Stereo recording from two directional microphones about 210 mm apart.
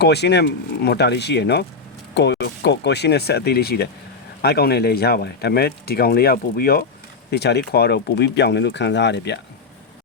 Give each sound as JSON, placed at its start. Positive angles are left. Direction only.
{"t": 0.0, "sound": "speech", "side_deg": 50}